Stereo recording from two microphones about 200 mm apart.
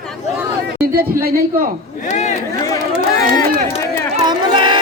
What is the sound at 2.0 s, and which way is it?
Speech, 35° left (ahead or behind).